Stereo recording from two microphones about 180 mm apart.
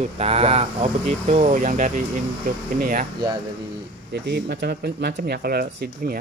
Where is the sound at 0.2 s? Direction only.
35° right (ahead or behind).